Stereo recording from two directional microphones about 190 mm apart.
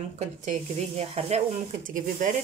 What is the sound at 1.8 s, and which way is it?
Speech, 45° right (ahead or behind).